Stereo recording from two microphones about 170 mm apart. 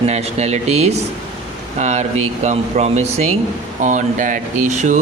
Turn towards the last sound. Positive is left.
turn(degrees=-45)  # may be behind; listen again after turning